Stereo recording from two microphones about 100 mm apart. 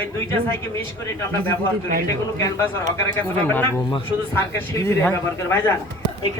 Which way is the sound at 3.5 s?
20° left (ahead or behind).